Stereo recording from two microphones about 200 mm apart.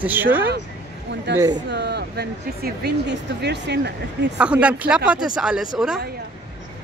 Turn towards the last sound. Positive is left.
turn(degrees=-5)  # may be behind; listen again after turning